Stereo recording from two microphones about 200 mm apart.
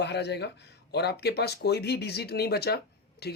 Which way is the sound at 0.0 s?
55° left (ahead or behind).